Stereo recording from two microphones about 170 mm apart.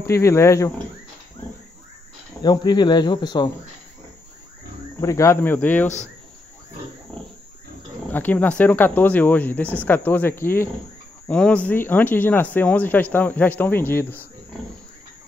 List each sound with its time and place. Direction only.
0.1 s speech: 15° left (ahead or behind)
2.4 s speech: 25° left (ahead or behind)
5.0 s speech: 15° left (ahead or behind)
7.1 s pig: 5° left (ahead or behind)
8.1 s speech: 10° left (ahead or behind)